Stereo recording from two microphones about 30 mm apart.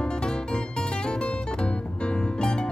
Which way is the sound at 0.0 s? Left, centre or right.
Left.